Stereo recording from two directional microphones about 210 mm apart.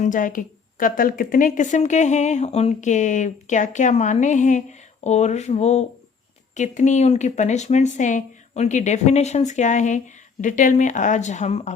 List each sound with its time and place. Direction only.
0.0 s a woman's voice: 40° left (ahead or behind)